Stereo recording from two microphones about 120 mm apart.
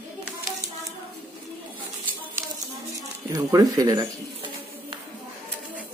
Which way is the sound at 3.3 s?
30° right (ahead or behind).